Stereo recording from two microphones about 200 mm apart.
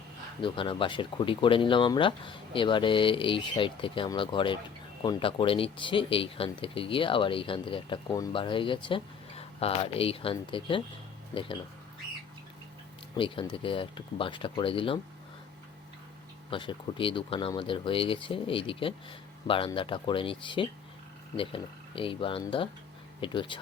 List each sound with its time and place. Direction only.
0.4 s speech: 25° left (ahead or behind)
13.1 s speech: 25° left (ahead or behind)
16.5 s speech: 25° left (ahead or behind)